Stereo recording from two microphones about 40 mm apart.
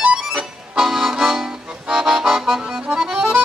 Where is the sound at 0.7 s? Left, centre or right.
Centre.